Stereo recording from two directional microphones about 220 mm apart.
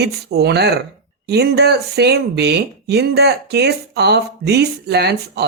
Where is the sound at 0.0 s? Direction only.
45° right (ahead or behind).